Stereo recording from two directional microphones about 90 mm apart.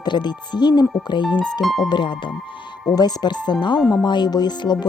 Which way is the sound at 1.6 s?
Centre (ahead or behind).